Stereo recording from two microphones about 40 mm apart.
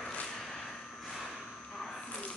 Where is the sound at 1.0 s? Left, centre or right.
Centre.